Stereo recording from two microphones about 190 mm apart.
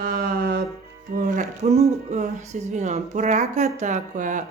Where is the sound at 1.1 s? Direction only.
45° right (ahead or behind).